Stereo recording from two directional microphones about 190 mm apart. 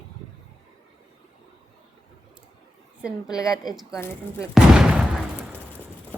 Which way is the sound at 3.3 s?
20° left (ahead or behind).